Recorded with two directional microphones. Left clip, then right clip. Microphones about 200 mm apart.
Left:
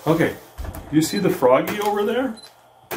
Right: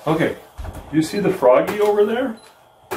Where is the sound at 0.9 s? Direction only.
50° left (ahead or behind).